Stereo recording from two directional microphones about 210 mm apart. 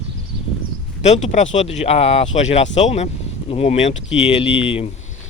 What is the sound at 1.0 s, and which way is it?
Speech, 30° left (ahead or behind).